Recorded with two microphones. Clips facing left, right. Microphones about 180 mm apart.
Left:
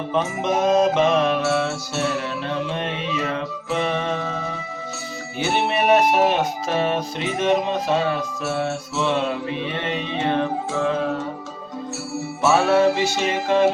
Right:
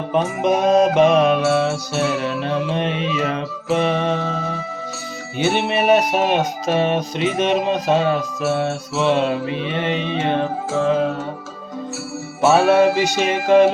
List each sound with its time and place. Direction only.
0.1 s music: 15° right (ahead or behind)
3.7 s music: 20° right (ahead or behind)
5.4 s music: 20° right (ahead or behind)
12.5 s music: 20° right (ahead or behind)